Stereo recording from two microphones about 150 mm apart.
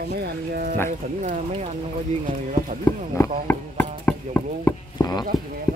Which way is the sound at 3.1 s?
15° left (ahead or behind).